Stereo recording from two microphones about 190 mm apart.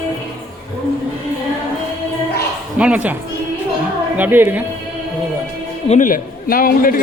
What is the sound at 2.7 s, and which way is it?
Speech, 5° right (ahead or behind).